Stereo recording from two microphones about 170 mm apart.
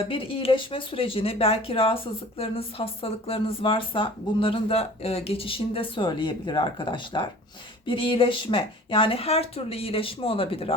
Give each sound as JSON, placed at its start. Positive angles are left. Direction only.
{"t": 0.0, "sound": "speech", "side_deg": 30}